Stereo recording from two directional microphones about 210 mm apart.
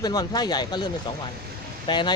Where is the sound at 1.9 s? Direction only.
20° left (ahead or behind).